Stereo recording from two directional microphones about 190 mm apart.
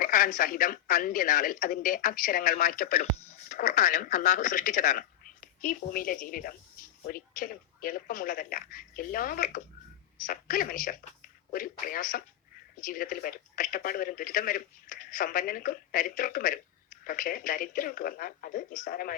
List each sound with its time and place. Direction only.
0.0 s speech: 45° left (ahead or behind)